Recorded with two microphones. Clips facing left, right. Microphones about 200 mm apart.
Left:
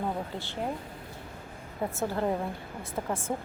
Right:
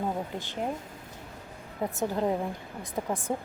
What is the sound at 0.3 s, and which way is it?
Speech, 15° right (ahead or behind).